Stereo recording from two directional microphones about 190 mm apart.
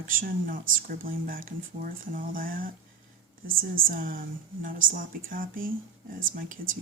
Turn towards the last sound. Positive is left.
turn(degrees=-45)  # may be behind; listen again after turning